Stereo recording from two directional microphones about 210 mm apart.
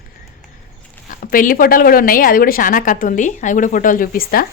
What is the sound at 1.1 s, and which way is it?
A woman's voice, 40° left (ahead or behind).